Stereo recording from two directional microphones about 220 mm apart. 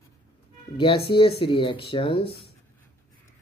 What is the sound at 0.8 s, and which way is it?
Speech, 25° left (ahead or behind).